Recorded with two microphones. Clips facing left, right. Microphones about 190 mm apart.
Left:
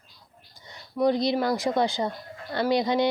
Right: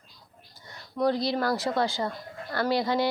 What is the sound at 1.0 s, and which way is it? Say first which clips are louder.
Speech: left 3 dB; 20° left (ahead or behind).